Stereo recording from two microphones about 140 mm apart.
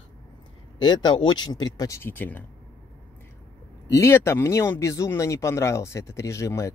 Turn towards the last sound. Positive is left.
turn(degrees=20)  # may be behind; listen again after turning